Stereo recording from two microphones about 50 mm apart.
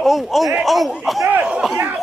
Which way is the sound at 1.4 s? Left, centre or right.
Centre.